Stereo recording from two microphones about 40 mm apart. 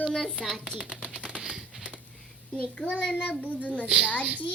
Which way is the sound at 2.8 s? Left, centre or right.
Left.